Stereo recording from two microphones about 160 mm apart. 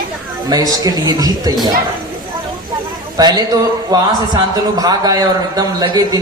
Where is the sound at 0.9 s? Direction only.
25° right (ahead or behind).